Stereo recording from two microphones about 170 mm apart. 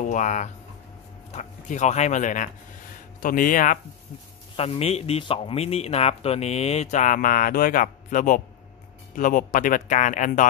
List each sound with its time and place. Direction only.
0.0 s speech: 45° left (ahead or behind)
4.6 s speech: 35° left (ahead or behind)